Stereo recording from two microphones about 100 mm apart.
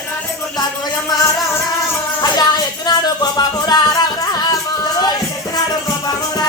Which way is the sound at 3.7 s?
40° left (ahead or behind).